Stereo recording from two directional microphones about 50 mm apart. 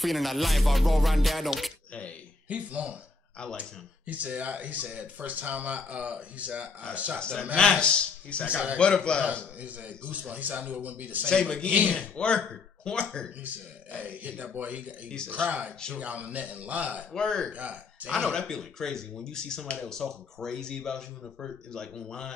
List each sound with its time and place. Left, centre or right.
0.0 s music: centre
2.4 s speech: right
4.1 s speech: right
7.2 s speech: centre
8.5 s speech: right
8.7 s speech: centre
10.1 s a man's voice: right
11.2 s speech: centre
14.4 s a man's voice: right
17.1 s speech: centre
17.5 s speech: right
18.2 s speech: centre